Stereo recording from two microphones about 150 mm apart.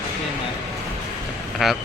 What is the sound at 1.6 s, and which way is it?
Speech, centre (ahead or behind).